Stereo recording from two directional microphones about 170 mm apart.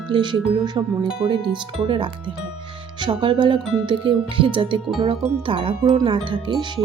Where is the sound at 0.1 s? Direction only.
25° right (ahead or behind).